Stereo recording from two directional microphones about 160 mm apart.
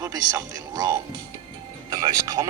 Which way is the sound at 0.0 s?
25° right (ahead or behind).